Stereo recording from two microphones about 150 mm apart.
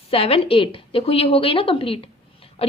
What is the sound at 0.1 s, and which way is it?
A woman's voice, 40° left (ahead or behind).